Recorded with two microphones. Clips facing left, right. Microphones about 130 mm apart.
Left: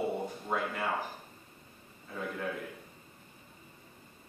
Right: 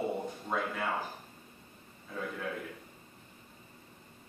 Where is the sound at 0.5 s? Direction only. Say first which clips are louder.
Left 1 dB; 10° left (ahead or behind).